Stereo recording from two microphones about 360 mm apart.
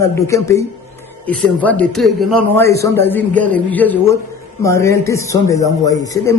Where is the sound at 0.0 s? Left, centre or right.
Centre.